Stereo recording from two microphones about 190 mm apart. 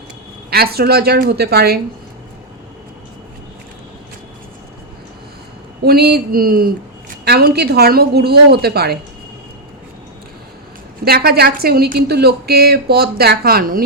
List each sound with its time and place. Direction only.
0.5 s a woman's voice: 55° right (ahead or behind)
5.8 s a sound: 55° right (ahead or behind)
7.3 s a woman's voice: 55° right (ahead or behind)
11.0 s a woman's voice: 55° right (ahead or behind)